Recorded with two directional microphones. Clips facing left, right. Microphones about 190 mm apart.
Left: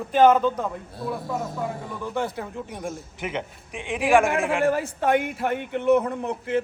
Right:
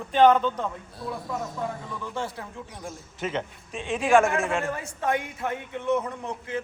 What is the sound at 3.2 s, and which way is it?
A man's voice, 15° left (ahead or behind).